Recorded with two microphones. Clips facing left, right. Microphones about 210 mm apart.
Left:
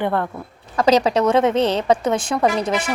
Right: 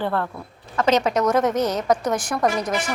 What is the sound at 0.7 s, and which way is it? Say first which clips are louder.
A woman's voice: left 3 dB; 35° left (ahead or behind).